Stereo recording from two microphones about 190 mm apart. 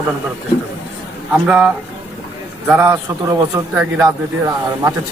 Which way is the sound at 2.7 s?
15° right (ahead or behind).